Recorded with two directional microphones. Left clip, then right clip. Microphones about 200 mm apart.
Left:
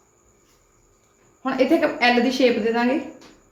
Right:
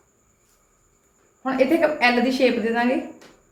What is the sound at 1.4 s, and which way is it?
A woman's voice, 30° left (ahead or behind).